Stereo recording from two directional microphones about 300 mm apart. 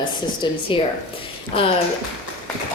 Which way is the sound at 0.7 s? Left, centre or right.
Centre.